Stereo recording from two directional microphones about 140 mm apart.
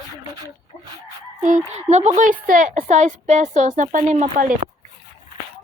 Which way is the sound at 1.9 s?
55° right (ahead or behind).